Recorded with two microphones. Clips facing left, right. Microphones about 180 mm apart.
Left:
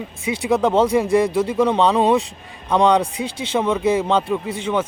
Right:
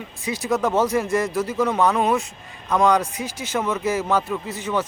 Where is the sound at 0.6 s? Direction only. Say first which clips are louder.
Left 4 dB; 30° left (ahead or behind).